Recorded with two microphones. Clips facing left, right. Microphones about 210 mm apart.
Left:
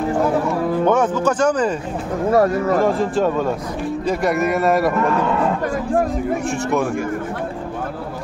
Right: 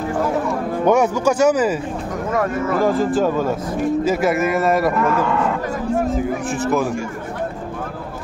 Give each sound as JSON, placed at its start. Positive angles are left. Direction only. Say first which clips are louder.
{"t": 0.8, "sound": "speech", "louder": "right 3 dB", "side_deg": -10}
{"t": 2.3, "sound": "speech", "louder": "left 4 dB", "side_deg": 35}
{"t": 2.8, "sound": "a man's voice", "louder": "even", "side_deg": 0}
{"t": 6.1, "sound": "a man's voice", "louder": "even", "side_deg": 0}